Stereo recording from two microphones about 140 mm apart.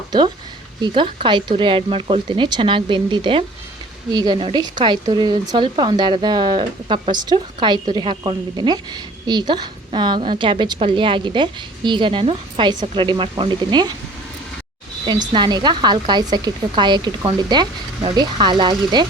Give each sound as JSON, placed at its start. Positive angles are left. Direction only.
{"t": 0.8, "sound": "a woman's voice", "side_deg": -35}
{"t": 4.4, "sound": "a woman's voice", "side_deg": -40}
{"t": 15.3, "sound": "a woman's voice", "side_deg": -30}